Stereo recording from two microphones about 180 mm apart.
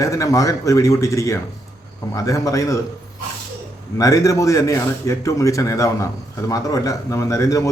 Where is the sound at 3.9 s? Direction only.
20° left (ahead or behind).